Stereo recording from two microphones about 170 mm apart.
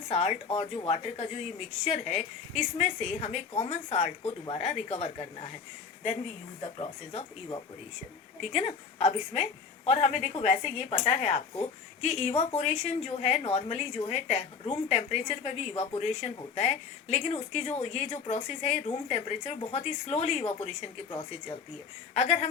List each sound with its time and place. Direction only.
0.1 s a woman's voice: 35° left (ahead or behind)
6.6 s a woman's voice: 35° left (ahead or behind)